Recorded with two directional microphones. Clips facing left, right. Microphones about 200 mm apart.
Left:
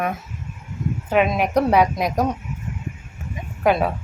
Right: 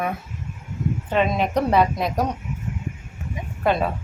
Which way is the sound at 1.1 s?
10° left (ahead or behind).